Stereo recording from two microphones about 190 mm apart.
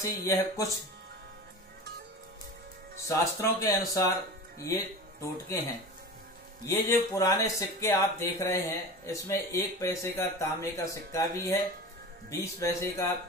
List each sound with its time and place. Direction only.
0.0 s speech: 20° left (ahead or behind)
3.1 s speech: 15° left (ahead or behind)